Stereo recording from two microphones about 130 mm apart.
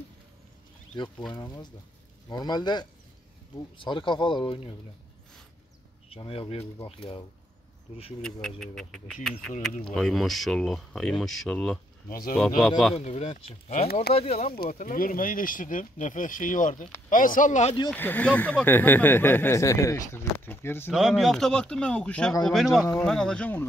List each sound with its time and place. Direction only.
0.9 s speech: 35° left (ahead or behind)
6.0 s speech: 45° left (ahead or behind)
8.2 s speech: 5° left (ahead or behind)
12.9 s speech: 55° left (ahead or behind)
14.7 s speech: 85° left; by 17.7 s 65° left (ahead or behind)
17.9 s speech: 15° left (ahead or behind)
20.9 s speech: centre (ahead or behind)